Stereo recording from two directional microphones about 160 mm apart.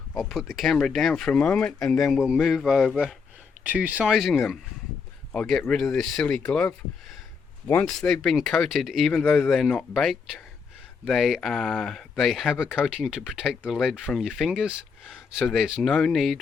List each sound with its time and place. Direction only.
0.2 s speech: centre (ahead or behind)
3.6 s speech: 10° right (ahead or behind); by 6.7 s 5° left (ahead or behind)
7.9 s speech: centre (ahead or behind)